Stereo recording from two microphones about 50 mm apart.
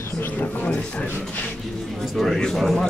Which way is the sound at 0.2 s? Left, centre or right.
Left.